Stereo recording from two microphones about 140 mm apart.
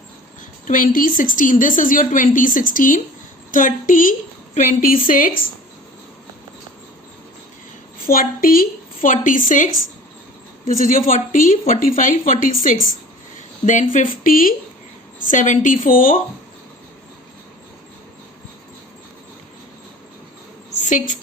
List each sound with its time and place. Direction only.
0.7 s a woman's voice: 80° left
7.9 s a woman's voice: 90° left
15.3 s a woman's voice: 65° left (ahead or behind)
20.8 s a woman's voice: 65° left (ahead or behind)